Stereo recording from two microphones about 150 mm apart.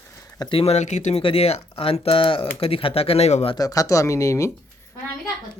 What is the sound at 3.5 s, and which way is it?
Speech, 25° left (ahead or behind).